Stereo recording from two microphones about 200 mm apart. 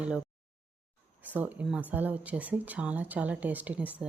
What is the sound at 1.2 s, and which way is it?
A woman's voice, 10° right (ahead or behind).